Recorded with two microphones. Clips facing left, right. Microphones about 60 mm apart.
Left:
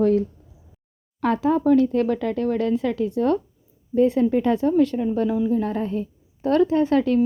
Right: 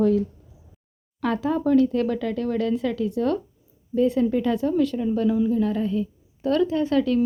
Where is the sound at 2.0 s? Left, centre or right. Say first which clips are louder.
Left 2 dB; centre; by 7.1 s left.